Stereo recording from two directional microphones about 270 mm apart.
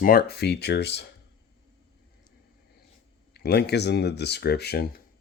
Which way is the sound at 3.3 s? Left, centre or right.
Left.